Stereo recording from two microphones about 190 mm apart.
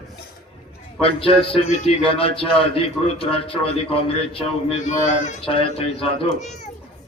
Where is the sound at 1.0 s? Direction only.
30° left (ahead or behind).